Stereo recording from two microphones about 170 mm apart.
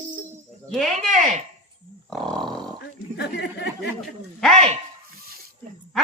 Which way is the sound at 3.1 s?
80° left.